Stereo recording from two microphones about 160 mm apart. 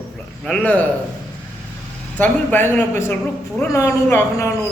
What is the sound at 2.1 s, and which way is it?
A man's voice, 10° left (ahead or behind).